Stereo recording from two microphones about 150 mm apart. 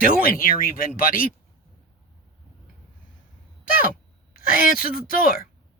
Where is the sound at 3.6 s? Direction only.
70° left (ahead or behind).